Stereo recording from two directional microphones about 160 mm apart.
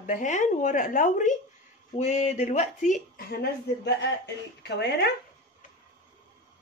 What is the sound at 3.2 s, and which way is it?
A woman's voice, 80° left.